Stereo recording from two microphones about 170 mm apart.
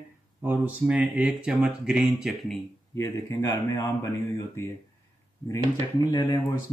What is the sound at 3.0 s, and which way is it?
Speech, 20° left (ahead or behind).